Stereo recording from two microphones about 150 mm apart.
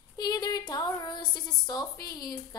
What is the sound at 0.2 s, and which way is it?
A woman's voice, 25° left (ahead or behind).